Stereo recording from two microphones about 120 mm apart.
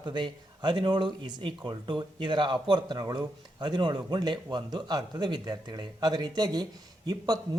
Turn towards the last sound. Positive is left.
turn(degrees=-35)  # may be behind; listen again after turning